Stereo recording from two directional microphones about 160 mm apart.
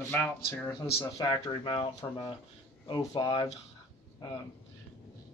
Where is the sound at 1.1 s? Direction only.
25° left (ahead or behind).